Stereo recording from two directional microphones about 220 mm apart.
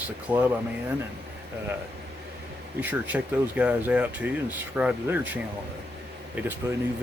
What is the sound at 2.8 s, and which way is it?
Speech, 10° right (ahead or behind).